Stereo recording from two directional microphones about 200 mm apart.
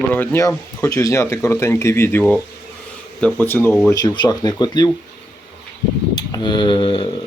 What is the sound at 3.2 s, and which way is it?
Speech, 10° left (ahead or behind).